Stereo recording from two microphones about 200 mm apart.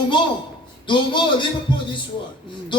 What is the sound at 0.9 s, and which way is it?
Speech, 25° left (ahead or behind).